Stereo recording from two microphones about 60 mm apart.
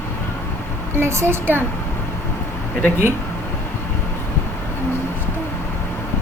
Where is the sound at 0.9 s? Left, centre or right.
Right.